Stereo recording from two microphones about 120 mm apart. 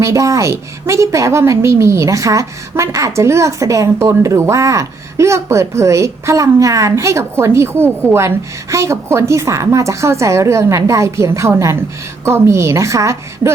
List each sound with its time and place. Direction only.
0.0 s a woman's voice: 25° right (ahead or behind)